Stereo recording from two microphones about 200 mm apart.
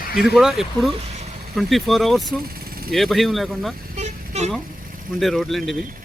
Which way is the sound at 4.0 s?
35° right (ahead or behind).